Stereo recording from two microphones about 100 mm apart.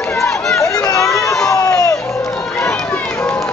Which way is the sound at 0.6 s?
35° left (ahead or behind).